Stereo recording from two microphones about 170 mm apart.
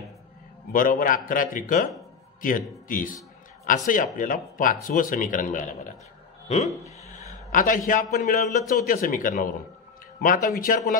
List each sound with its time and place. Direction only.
0.7 s a man's voice: 55° left (ahead or behind)